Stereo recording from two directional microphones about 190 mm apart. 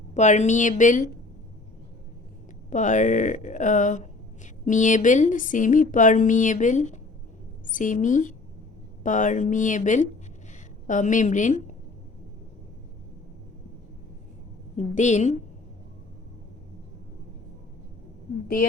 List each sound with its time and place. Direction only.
0.1 s speech: 40° left (ahead or behind)
2.6 s a woman's voice: 40° left (ahead or behind)
14.8 s speech: 40° left (ahead or behind)